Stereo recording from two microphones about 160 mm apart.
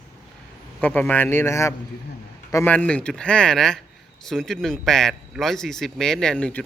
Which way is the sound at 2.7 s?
10° left (ahead or behind).